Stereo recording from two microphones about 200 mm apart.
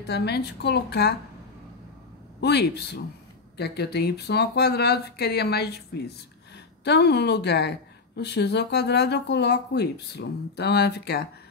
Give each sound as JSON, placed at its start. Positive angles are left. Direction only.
{"t": 0.0, "sound": "speech", "side_deg": 55}
{"t": 2.4, "sound": "speech", "side_deg": 55}